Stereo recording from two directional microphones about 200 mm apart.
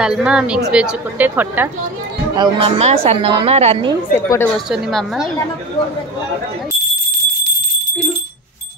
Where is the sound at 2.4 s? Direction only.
30° right (ahead or behind).